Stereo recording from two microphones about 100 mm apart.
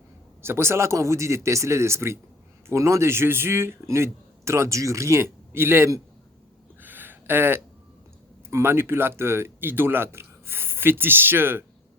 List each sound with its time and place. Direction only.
0.4 s speech: 25° right (ahead or behind)
6.8 s a sound: 20° right (ahead or behind)
8.4 s speech: 25° right (ahead or behind)